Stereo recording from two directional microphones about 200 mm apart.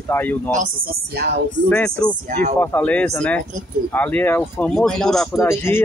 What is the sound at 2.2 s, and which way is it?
Speech, 35° right (ahead or behind).